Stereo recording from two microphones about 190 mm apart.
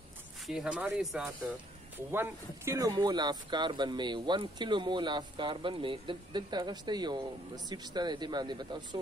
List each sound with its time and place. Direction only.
0.5 s speech: 5° right (ahead or behind); by 9.0 s 20° right (ahead or behind)